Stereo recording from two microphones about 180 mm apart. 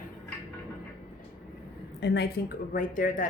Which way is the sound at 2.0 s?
65° left (ahead or behind).